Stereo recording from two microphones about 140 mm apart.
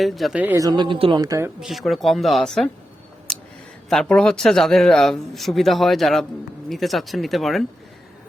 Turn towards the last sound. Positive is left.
turn(degrees=0)  # may be behind; listen again after turning